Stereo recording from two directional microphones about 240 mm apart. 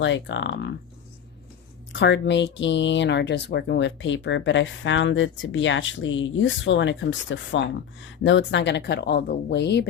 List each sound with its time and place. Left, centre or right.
0.0 s speech: left
1.9 s speech: left